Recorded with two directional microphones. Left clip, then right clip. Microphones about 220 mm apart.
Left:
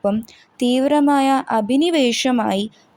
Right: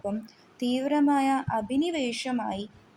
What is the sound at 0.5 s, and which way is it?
A woman's voice, 25° left (ahead or behind).